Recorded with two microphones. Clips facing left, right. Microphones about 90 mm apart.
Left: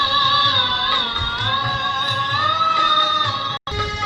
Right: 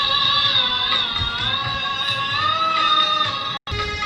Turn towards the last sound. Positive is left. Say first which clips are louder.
# left 2 dB
turn(degrees=25)  # may be behind; listen again after turning